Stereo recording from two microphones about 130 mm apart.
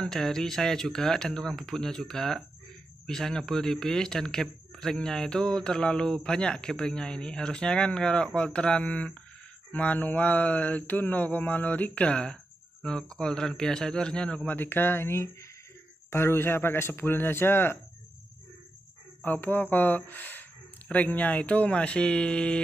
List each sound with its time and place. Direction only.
0.0 s speech: 5° left (ahead or behind)
9.7 s mantra: 10° left (ahead or behind)
19.2 s mantra: 15° left (ahead or behind)